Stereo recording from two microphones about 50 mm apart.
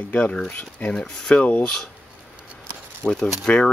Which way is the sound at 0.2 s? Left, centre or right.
Left.